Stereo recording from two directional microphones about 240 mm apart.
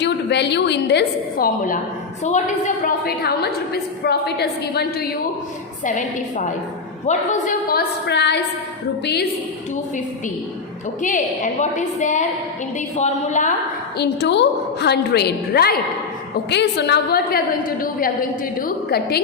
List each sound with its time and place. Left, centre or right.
0.0 s a woman's voice: left
11.0 s a woman's voice: left
14.0 s a woman's voice: left